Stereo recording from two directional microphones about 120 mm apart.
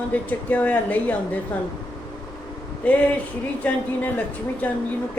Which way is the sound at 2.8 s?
10° left (ahead or behind).